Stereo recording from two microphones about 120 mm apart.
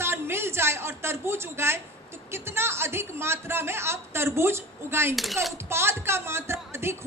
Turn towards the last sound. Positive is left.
turn(degrees=-20)  # may be behind; listen again after turning